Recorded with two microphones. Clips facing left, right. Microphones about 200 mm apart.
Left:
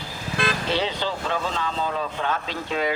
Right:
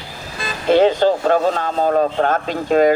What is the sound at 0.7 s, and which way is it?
Speech, 50° right (ahead or behind).